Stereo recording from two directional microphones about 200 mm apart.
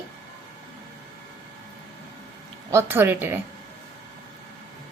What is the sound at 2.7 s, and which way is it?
Speech, 10° right (ahead or behind).